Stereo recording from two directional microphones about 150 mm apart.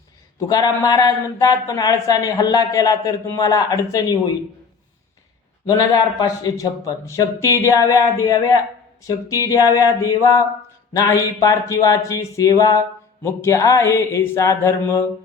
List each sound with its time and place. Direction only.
0.3 s speech: 25° left (ahead or behind)
5.6 s speech: 25° left (ahead or behind)